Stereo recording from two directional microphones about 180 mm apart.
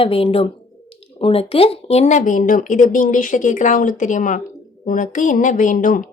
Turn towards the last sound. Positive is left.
turn(degrees=45)  # may be behind; listen again after turning